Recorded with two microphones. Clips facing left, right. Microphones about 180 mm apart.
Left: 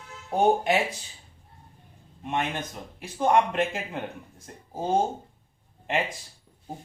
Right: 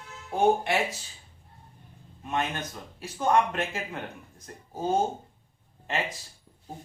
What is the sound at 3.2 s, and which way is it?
Speech, 20° left (ahead or behind).